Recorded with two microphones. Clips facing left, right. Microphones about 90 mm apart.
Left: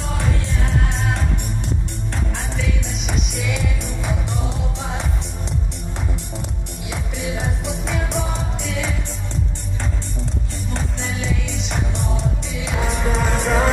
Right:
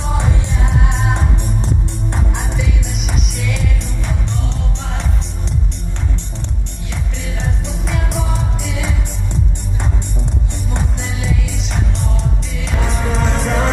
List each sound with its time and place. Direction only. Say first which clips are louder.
0.2 s music: right 3 dB; 20° right (ahead or behind)
3.1 s music: even; centre (ahead or behind)
7.3 s music: even; centre (ahead or behind)
11.2 s music: right 2 dB; centre (ahead or behind)